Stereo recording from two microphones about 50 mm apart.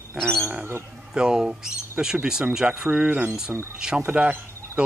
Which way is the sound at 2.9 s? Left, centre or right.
Right.